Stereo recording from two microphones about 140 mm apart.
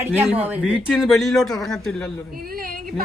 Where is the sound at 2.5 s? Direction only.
90° right.